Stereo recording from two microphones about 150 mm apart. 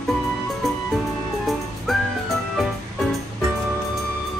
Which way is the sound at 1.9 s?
Centre (ahead or behind).